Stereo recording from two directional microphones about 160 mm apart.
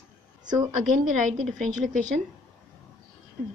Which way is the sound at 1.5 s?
50° right (ahead or behind).